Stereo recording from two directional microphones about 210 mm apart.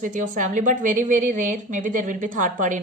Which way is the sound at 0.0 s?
35° right (ahead or behind).